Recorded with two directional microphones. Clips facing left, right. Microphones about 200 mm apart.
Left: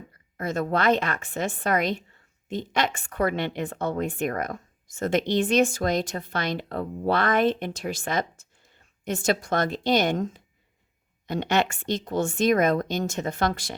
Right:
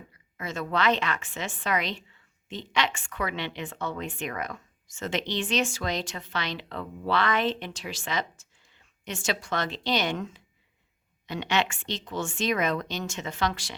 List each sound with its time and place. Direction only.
0.1 s a woman's voice: 50° left (ahead or behind)